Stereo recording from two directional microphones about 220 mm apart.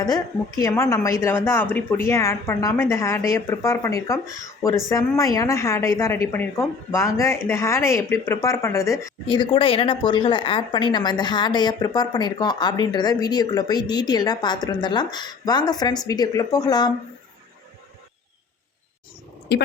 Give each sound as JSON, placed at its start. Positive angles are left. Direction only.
{"t": 0.0, "sound": "a woman's voice", "side_deg": 15}
{"t": 19.5, "sound": "speech", "side_deg": 45}